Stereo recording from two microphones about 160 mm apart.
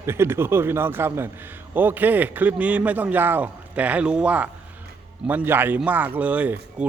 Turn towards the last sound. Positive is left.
turn(degrees=-10)  # may be behind; listen again after turning